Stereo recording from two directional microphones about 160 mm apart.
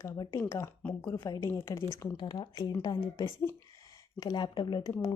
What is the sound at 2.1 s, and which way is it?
Speech, 30° left (ahead or behind).